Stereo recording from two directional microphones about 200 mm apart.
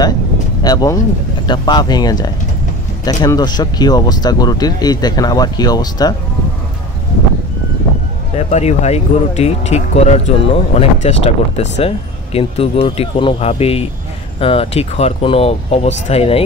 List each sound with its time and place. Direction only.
0.7 s speech: 20° left (ahead or behind)
8.4 s speech: 35° left (ahead or behind)